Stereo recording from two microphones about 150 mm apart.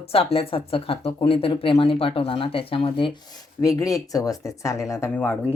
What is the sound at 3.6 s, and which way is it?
Speech, 20° left (ahead or behind).